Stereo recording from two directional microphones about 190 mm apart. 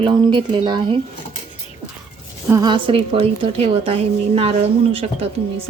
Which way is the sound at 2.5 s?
20° right (ahead or behind).